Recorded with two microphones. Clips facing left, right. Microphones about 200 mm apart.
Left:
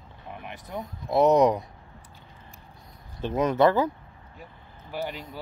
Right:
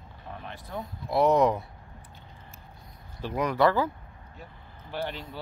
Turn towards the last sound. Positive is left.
turn(degrees=10)  # may be behind; listen again after turning